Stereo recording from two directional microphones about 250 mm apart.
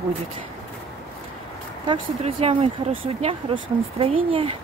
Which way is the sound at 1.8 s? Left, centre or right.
Centre.